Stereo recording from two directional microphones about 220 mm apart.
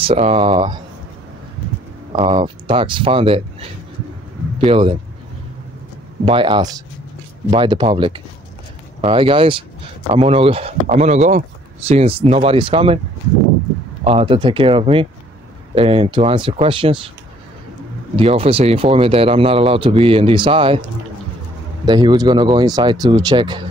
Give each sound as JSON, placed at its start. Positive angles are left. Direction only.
{"t": 0.0, "sound": "speech", "side_deg": -25}
{"t": 2.1, "sound": "speech", "side_deg": -25}
{"t": 4.6, "sound": "speech", "side_deg": -25}
{"t": 6.2, "sound": "speech", "side_deg": -25}
{"t": 14.0, "sound": "speech", "side_deg": -25}
{"t": 18.1, "sound": "speech", "side_deg": -25}
{"t": 21.8, "sound": "speech", "side_deg": -20}